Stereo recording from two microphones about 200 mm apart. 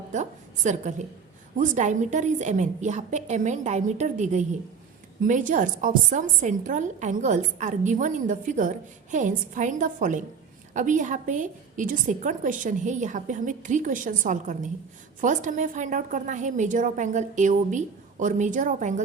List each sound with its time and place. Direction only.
0.1 s a woman's voice: 35° right (ahead or behind)